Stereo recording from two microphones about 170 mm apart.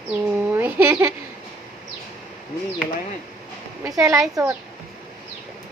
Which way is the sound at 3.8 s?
20° right (ahead or behind).